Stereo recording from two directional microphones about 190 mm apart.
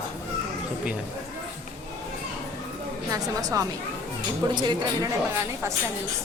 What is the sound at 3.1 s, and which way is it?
A woman's voice, 20° right (ahead or behind).